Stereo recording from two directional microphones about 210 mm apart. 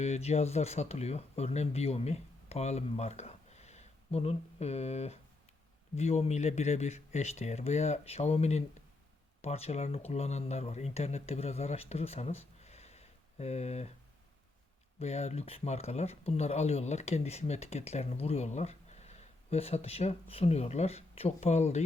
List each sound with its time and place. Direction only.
0.0 s speech: 30° left (ahead or behind)
14.9 s speech: 30° left (ahead or behind)